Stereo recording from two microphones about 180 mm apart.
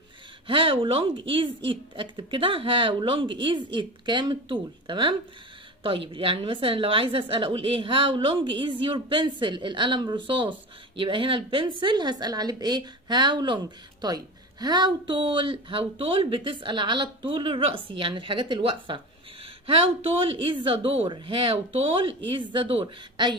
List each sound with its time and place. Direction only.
0.5 s speech: 30° right (ahead or behind)
20.6 s speech: 30° right (ahead or behind)